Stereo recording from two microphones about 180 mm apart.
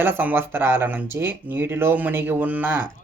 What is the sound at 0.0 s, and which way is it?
Speech, 10° right (ahead or behind).